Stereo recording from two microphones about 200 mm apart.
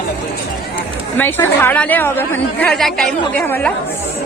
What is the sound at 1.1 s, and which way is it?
A woman's voice, 10° left (ahead or behind).